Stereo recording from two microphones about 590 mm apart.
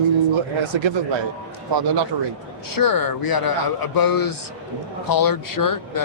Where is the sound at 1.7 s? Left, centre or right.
Right.